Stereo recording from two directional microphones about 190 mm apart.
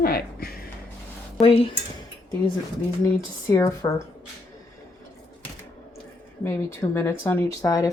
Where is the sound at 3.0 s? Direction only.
15° left (ahead or behind).